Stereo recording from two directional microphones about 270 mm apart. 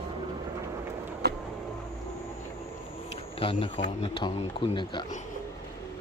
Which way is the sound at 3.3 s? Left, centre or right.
Centre.